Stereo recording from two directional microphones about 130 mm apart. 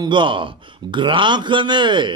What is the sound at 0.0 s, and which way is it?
A man's voice, 35° right (ahead or behind).